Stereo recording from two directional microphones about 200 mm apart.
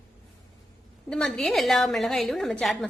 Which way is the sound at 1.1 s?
5° left (ahead or behind).